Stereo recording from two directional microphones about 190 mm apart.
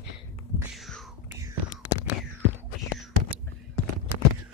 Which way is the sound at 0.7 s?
Centre (ahead or behind).